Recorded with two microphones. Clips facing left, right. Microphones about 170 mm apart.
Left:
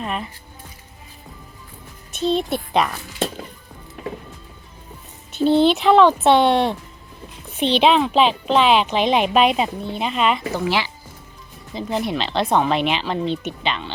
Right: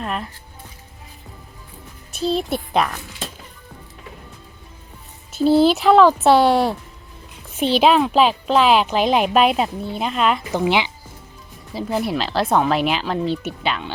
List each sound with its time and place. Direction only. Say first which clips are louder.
0.0 s speech: even; centre (ahead or behind)
2.2 s a child's voice: left 1 dB; centre (ahead or behind)
5.3 s a child's voice: right 1 dB; 5° right (ahead or behind)
10.5 s speech: right 3 dB; 20° right (ahead or behind)
11.7 s a child's voice: right 1 dB; 5° right (ahead or behind)